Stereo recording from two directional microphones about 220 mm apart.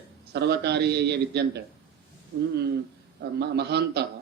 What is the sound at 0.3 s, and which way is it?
Speech, 50° right (ahead or behind).